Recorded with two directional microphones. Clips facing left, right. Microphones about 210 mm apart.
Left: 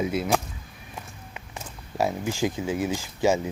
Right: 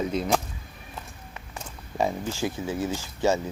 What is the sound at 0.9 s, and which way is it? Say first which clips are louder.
Run: left 1 dB; 15° left (ahead or behind).